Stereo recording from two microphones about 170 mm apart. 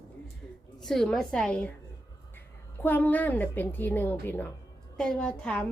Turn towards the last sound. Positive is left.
turn(degrees=5)  # may be behind; listen again after turning